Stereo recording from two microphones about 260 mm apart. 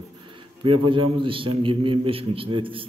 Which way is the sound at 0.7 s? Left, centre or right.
Centre.